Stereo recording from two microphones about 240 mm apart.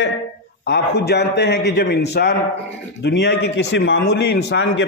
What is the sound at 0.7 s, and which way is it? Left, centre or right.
A man's voice, left.